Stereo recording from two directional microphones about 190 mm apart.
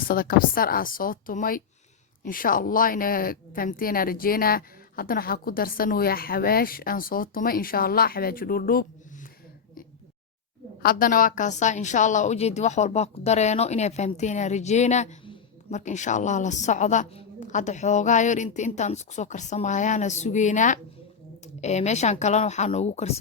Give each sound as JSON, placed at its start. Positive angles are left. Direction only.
{"t": 0.1, "sound": "a woman's voice", "side_deg": 50}
{"t": 10.8, "sound": "a woman's voice", "side_deg": 45}